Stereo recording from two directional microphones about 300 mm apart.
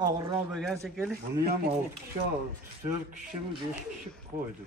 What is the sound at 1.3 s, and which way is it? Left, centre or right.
Speech, right.